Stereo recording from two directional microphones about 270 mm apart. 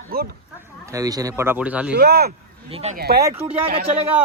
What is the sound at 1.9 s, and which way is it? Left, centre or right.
Speech, right.